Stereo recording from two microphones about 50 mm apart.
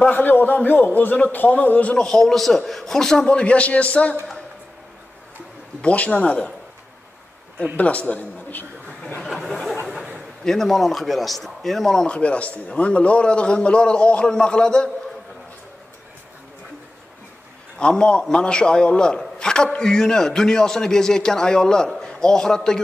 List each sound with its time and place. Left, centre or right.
0.1 s a man's voice: left
2.0 s a man's voice: centre; by 4.2 s left
5.8 s a man's voice: left
7.7 s a man's voice: left
9.0 s a sound: centre
9.3 s a sound: centre
10.4 s speech: centre
12.1 s a man's voice: left
17.7 s a man's voice: centre